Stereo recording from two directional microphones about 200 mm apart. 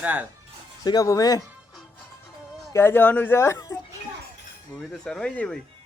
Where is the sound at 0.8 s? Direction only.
20° left (ahead or behind).